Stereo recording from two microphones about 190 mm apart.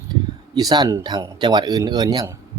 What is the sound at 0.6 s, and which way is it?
A man's voice, 20° right (ahead or behind).